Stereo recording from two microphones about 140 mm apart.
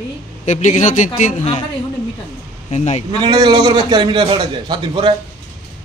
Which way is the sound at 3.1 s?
30° right (ahead or behind).